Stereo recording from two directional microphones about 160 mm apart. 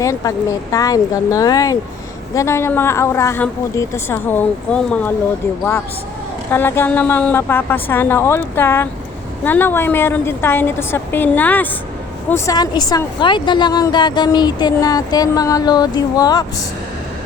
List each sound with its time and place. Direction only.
0.0 s a woman's voice: 20° left (ahead or behind)
6.5 s a woman's voice: 15° left (ahead or behind)
12.3 s speech: 25° left (ahead or behind)